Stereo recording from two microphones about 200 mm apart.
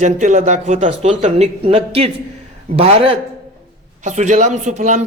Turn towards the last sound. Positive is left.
turn(degrees=-35)  # may be behind; listen again after turning